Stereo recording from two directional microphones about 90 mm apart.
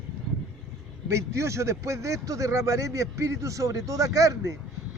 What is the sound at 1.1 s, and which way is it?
Speech, 35° right (ahead or behind).